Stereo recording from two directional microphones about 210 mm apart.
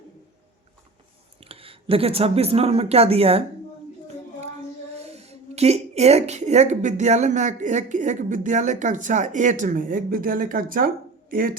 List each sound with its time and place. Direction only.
1.4 s speech: 25° right (ahead or behind)
4.9 s speech: 30° right (ahead or behind)